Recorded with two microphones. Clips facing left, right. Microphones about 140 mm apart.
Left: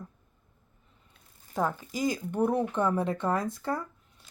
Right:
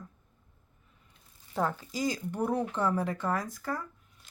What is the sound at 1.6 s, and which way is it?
Speech, 15° left (ahead or behind).